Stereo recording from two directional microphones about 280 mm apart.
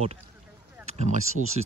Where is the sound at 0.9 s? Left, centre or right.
Right.